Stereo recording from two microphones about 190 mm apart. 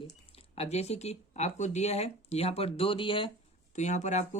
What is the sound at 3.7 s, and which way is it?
Speech, 40° left (ahead or behind).